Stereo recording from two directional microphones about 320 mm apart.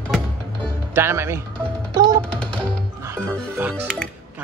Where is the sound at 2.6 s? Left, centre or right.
Centre.